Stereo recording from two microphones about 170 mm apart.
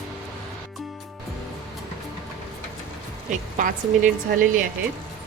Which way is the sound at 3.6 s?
50° right (ahead or behind).